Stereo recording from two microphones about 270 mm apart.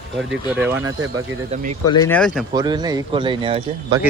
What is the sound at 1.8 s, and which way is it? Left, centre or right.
Speech, centre.